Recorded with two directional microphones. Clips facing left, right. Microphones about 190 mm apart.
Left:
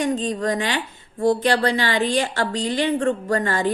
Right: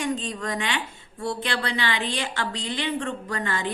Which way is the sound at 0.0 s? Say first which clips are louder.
Left 6 dB; 40° left (ahead or behind).